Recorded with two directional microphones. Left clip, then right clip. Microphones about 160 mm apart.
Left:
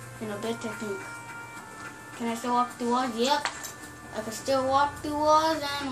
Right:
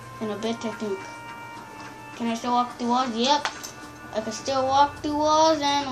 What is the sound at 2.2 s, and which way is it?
A woman's voice, 50° right (ahead or behind).